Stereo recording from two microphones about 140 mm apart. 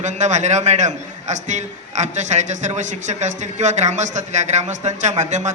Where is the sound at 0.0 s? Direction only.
55° right (ahead or behind).